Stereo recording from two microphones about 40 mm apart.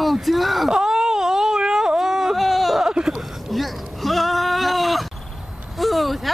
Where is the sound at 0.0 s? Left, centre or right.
Centre.